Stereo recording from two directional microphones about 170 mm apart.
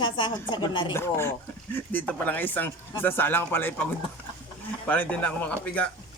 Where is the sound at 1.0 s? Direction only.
15° left (ahead or behind).